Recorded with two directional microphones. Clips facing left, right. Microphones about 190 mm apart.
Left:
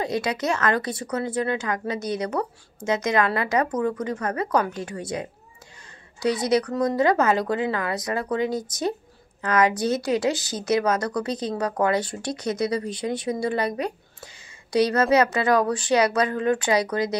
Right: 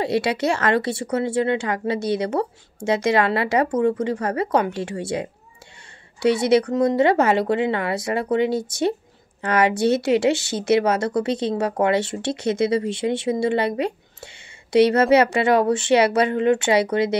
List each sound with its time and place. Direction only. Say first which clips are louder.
0.0 s a woman's voice: right 4 dB; 30° right (ahead or behind)